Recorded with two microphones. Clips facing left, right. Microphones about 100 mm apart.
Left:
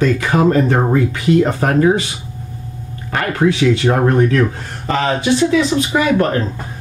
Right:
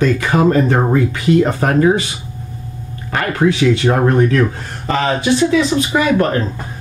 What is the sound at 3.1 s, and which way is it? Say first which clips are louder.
Speech: even; 20° right (ahead or behind).